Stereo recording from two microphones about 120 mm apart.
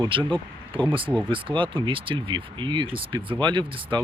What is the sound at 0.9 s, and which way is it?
Speech, 45° right (ahead or behind).